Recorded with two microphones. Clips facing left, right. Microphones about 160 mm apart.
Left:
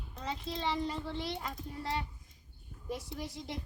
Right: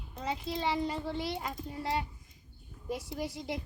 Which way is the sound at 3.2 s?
5° right (ahead or behind).